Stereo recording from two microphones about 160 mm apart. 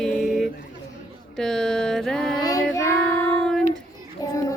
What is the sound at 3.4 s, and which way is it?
Music, 5° left (ahead or behind).